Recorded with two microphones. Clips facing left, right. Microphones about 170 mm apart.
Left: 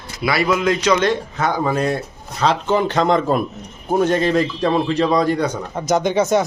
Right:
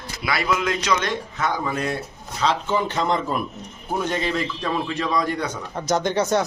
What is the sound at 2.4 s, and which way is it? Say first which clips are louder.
Speech: left 5 dB; 85° left.